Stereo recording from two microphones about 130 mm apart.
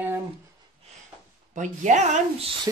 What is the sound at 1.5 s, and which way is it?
Speech, 70° right (ahead or behind).